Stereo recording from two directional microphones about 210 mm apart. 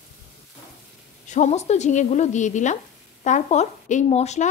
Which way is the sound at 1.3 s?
35° left (ahead or behind).